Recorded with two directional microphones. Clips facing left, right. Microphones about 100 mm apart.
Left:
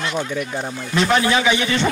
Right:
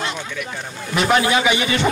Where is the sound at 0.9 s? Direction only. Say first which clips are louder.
Even; 10° right (ahead or behind).